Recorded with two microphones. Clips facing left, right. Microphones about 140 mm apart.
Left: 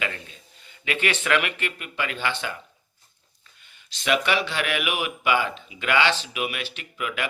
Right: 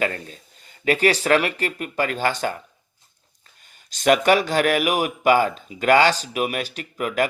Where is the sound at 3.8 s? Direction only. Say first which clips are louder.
Right 7 dB; 45° right (ahead or behind).